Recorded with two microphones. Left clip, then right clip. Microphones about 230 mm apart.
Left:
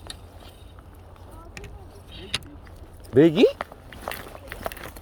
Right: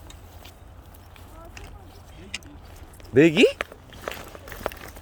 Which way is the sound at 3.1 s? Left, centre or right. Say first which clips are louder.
Even; centre.